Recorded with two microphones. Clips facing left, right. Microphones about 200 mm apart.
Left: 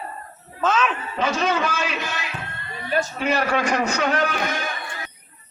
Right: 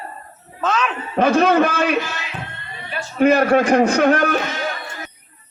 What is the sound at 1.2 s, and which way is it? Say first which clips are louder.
Speech: right 8 dB; 55° right (ahead or behind).